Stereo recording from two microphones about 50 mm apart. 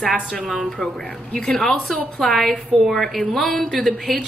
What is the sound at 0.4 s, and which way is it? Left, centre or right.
Speech, centre.